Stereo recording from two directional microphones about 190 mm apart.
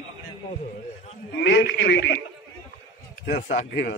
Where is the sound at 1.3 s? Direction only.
65° left (ahead or behind).